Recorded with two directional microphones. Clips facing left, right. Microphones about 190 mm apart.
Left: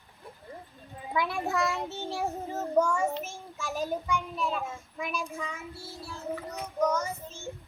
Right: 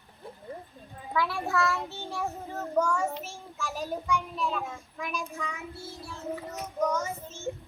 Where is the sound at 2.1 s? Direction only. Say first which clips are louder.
Left 1 dB; 30° left (ahead or behind).